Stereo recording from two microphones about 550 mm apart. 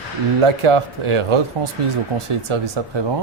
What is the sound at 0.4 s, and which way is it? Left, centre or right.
Speech, right.